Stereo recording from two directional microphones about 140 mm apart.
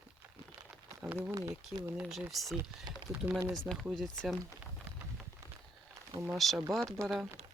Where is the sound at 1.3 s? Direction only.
25° right (ahead or behind).